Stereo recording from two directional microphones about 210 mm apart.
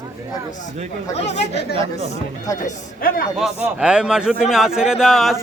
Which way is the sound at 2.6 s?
45° left (ahead or behind).